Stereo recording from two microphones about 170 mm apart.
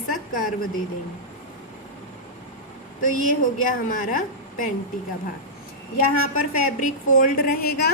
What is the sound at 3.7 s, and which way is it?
Speech, 55° left (ahead or behind).